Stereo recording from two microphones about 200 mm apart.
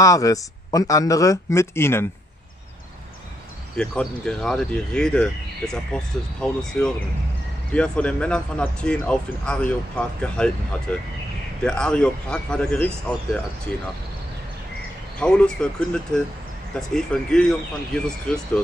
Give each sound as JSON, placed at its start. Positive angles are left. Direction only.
{"t": 0.0, "sound": "speech", "side_deg": 15}
{"t": 3.7, "sound": "speech", "side_deg": 5}
{"t": 15.1, "sound": "speech", "side_deg": 5}
{"t": 16.9, "sound": "speech", "side_deg": 5}